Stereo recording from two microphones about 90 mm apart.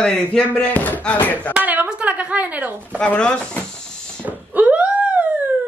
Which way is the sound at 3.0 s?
10° left (ahead or behind).